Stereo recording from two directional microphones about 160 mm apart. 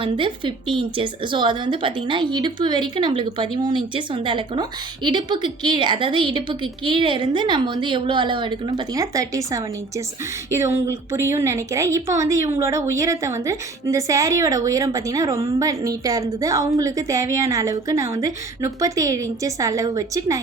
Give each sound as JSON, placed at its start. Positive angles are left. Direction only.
{"t": 0.0, "sound": "a woman's voice", "side_deg": -30}